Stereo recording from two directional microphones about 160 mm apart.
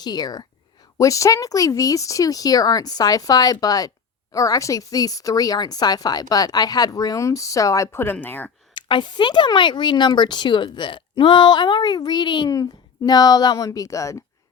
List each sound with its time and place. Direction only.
0.0 s speech: 25° left (ahead or behind)
8.7 s speech: 30° left (ahead or behind)